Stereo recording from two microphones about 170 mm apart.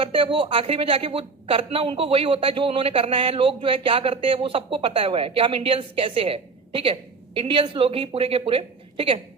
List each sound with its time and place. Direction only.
0.0 s a woman's voice: 30° right (ahead or behind)